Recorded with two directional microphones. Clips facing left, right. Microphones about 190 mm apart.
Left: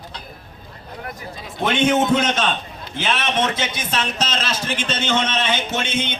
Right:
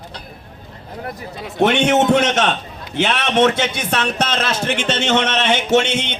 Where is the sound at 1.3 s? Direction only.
70° right (ahead or behind).